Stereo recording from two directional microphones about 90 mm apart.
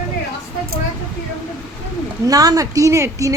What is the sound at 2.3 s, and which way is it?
A woman's voice, 40° right (ahead or behind).